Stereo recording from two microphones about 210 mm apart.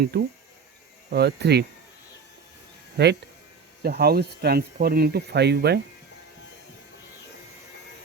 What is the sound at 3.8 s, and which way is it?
Speech, 50° right (ahead or behind).